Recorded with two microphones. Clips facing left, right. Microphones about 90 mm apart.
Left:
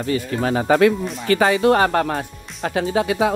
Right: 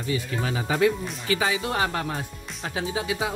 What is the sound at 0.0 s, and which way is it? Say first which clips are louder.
Speech: left 7 dB; 55° left (ahead or behind).